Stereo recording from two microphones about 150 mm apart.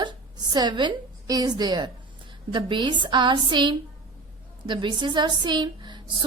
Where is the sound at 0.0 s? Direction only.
30° right (ahead or behind).